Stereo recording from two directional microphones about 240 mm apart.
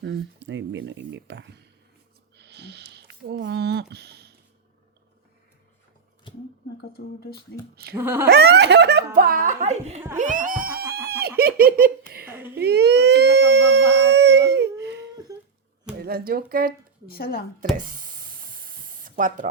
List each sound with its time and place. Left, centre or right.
0.0 s speech: right
2.3 s sniff: right
6.9 s speech: left
7.9 s speech: centre
8.3 s speech: right
12.2 s speech: centre
12.5 s a sound: right
15.1 s a sound: centre
16.0 s speech: right
17.1 s speech: left
17.7 s hiss: right